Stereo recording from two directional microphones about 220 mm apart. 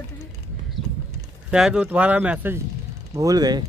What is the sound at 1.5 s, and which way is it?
Speech, 5° right (ahead or behind).